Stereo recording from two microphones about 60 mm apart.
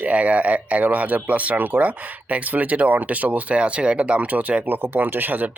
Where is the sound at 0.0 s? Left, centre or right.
Right.